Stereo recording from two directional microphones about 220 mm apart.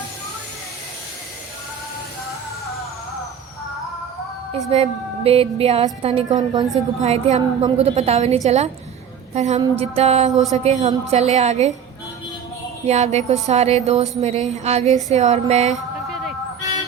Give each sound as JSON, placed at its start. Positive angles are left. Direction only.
{"t": 4.7, "sound": "a woman's voice", "side_deg": -25}
{"t": 7.0, "sound": "a woman's voice", "side_deg": -30}
{"t": 12.9, "sound": "a woman's voice", "side_deg": -30}